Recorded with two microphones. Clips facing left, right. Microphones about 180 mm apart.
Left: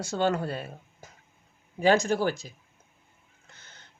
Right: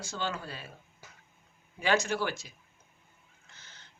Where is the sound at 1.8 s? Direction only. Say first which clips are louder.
Left 6 dB; 45° left (ahead or behind).